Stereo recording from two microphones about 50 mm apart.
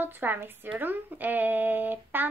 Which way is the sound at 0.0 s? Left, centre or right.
Right.